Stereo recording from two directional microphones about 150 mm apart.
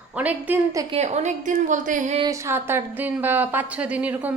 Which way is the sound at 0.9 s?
50° right (ahead or behind).